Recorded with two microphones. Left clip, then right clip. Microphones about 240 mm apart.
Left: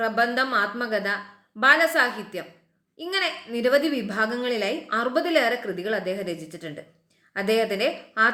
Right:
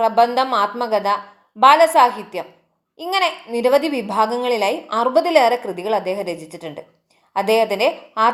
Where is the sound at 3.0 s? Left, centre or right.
Centre.